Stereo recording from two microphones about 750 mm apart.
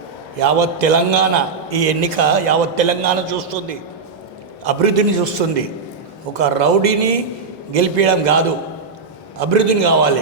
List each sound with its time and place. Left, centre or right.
0.3 s a man's voice: right